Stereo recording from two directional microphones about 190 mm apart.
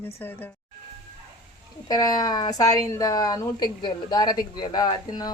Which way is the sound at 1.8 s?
20° left (ahead or behind).